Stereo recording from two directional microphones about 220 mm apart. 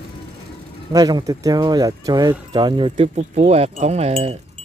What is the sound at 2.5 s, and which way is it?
Wind chime, 20° right (ahead or behind).